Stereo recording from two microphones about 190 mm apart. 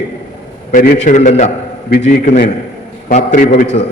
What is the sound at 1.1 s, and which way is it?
A man's voice, 35° left (ahead or behind).